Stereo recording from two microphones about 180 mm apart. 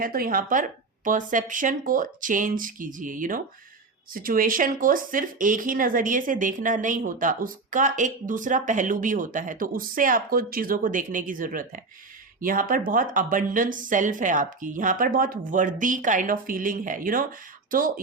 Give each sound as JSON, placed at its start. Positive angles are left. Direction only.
{"t": 0.0, "sound": "speech", "side_deg": -55}